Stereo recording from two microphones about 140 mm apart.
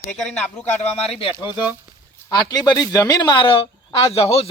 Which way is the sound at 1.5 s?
15° right (ahead or behind).